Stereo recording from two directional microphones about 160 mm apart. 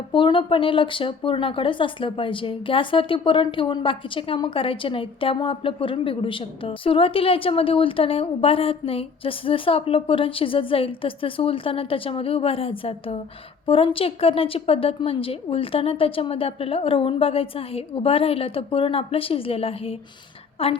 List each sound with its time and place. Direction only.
0.1 s speech: 30° left (ahead or behind)